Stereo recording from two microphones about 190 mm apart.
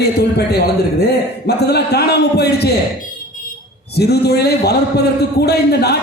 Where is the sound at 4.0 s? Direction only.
60° left (ahead or behind).